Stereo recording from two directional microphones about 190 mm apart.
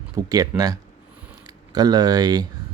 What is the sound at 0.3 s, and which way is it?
Speech, 20° right (ahead or behind).